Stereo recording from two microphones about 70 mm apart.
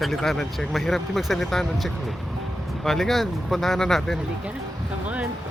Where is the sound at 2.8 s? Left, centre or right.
Centre.